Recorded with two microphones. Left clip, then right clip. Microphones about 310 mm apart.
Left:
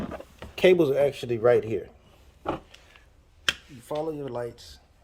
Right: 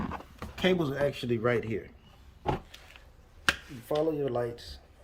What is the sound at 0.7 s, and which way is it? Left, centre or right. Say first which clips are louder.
Speech: left 9 dB; left.